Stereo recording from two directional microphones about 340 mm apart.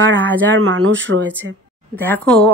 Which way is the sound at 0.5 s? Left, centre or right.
Right.